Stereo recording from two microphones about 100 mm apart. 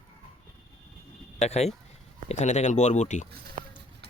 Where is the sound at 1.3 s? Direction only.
90° left.